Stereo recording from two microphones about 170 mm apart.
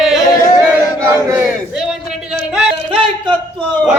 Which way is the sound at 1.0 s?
15° right (ahead or behind).